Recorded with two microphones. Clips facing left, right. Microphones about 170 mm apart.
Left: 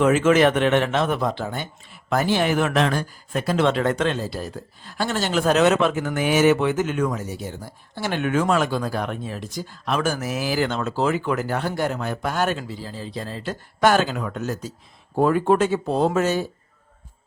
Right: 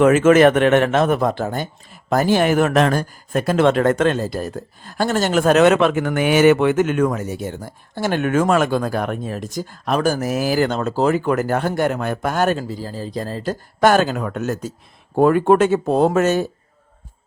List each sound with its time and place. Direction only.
0.0 s speech: 50° right (ahead or behind)
15.1 s speech: 60° right (ahead or behind)